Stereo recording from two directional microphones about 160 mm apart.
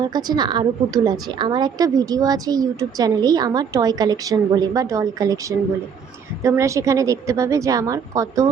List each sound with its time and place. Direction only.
0.0 s a woman's voice: 25° right (ahead or behind)